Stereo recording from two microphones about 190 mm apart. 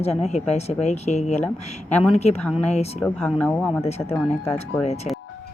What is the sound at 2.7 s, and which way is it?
Speech, 35° left (ahead or behind).